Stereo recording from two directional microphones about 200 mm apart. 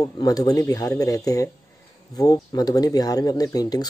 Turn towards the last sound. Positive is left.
turn(degrees=20)  # may be behind; listen again after turning